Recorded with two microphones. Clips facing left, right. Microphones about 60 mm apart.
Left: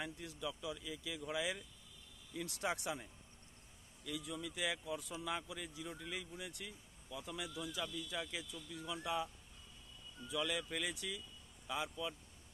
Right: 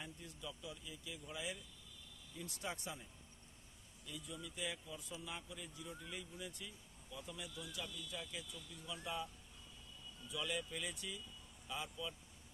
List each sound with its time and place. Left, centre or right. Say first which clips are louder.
0.0 s speech: left 7 dB; left
2.3 s speech: left 6 dB; left
4.0 s speech: left 6 dB; left
6.3 s speech: left 2 dB; left
10.4 s speech: left 2 dB; left